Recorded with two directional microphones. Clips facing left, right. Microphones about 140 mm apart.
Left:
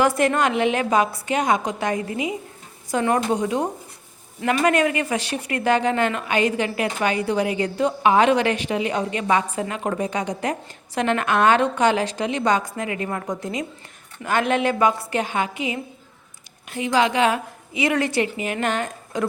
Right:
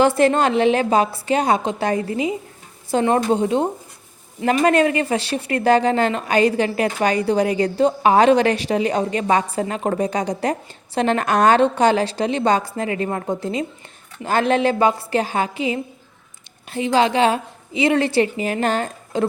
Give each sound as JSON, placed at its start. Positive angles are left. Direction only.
{"t": 0.0, "sound": "a woman's voice", "side_deg": -30}